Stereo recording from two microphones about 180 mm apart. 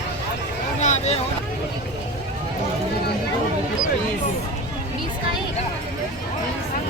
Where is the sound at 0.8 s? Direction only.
40° left (ahead or behind).